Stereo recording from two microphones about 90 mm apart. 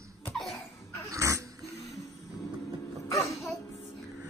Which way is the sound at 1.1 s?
35° right (ahead or behind).